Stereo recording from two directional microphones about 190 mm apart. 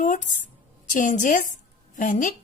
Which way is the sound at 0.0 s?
40° left (ahead or behind).